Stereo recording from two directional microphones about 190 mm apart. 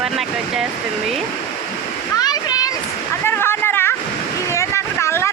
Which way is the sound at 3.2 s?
10° left (ahead or behind).